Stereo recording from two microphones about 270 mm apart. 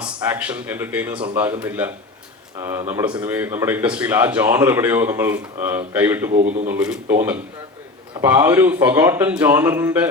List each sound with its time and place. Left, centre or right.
0.0 s speech: centre
6.3 s speech: right
6.7 s speech: centre